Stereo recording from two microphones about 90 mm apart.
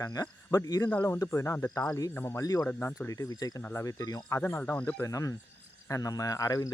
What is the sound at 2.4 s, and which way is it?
Speech, 40° left (ahead or behind).